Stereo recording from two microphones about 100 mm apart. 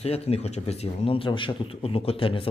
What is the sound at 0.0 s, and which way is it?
Speech, 90° left.